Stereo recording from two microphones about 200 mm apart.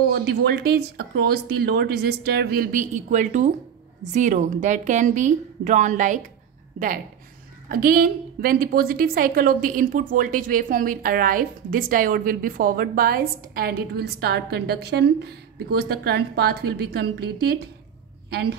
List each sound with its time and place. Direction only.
0.1 s a woman's voice: 55° right (ahead or behind)
7.6 s a woman's voice: 45° right (ahead or behind)